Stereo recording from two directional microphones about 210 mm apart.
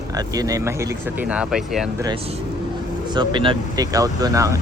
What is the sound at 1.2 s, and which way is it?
Speech, 5° right (ahead or behind).